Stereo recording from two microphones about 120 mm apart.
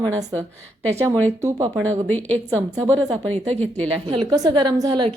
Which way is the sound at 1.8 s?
10° left (ahead or behind).